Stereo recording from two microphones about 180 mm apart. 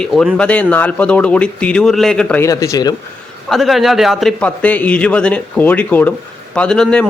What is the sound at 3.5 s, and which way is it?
A man's voice, centre (ahead or behind).